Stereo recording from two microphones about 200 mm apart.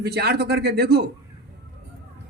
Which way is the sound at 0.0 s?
55° right (ahead or behind).